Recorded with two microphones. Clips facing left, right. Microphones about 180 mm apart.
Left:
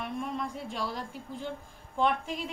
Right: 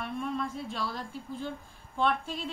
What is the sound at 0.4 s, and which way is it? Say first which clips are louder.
Speech: even; 15° left (ahead or behind).